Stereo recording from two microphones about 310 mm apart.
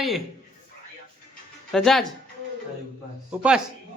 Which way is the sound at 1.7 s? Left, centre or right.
Centre.